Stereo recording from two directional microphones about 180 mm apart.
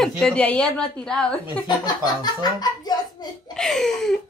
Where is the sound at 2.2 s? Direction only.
25° left (ahead or behind).